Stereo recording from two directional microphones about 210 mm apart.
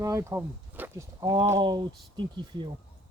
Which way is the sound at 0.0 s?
15° right (ahead or behind).